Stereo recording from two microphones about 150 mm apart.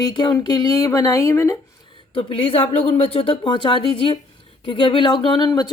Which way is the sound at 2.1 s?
35° left (ahead or behind).